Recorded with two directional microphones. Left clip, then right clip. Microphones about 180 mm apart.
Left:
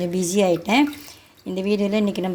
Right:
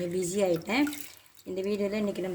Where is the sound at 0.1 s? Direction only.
40° left (ahead or behind).